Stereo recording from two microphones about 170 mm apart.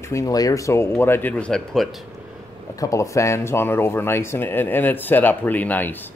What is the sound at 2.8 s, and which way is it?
Speech, 20° left (ahead or behind).